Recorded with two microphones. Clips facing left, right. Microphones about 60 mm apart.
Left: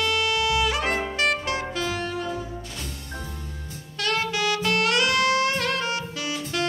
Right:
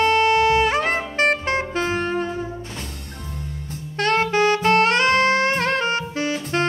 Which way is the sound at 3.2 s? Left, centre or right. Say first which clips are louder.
Right 3 dB; right.